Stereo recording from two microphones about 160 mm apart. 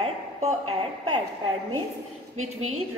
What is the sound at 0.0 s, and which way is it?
A woman's voice, 40° right (ahead or behind).